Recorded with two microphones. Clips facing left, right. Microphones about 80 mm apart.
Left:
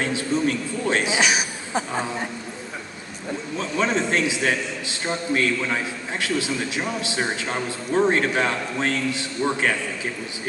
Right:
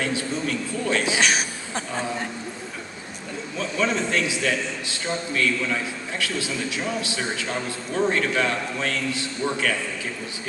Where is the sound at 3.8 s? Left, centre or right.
Left.